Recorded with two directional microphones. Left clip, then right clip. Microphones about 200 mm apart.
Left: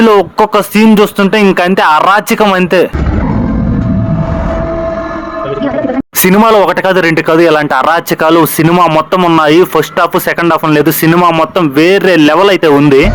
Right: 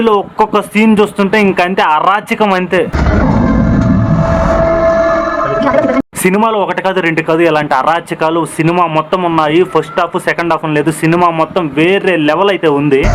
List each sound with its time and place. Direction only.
0.0 s speech: 30° left (ahead or behind)
6.2 s speech: 35° left (ahead or behind)